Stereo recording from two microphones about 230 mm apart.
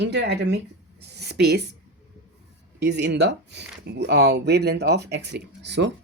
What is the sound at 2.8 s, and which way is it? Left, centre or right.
Speech, right.